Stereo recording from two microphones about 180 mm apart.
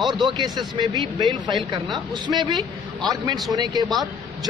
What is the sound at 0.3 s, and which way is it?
A man's voice, 25° right (ahead or behind).